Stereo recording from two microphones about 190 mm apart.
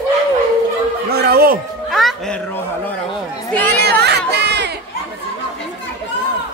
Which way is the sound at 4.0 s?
60° right (ahead or behind).